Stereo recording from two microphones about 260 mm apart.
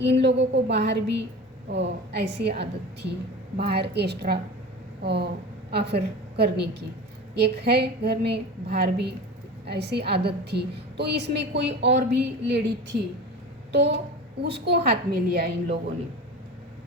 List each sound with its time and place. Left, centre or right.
0.0 s a woman's voice: right